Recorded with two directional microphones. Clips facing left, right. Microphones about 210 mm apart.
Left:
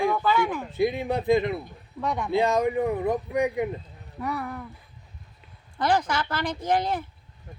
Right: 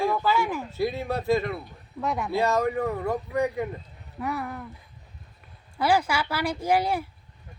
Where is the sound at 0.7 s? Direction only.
15° left (ahead or behind).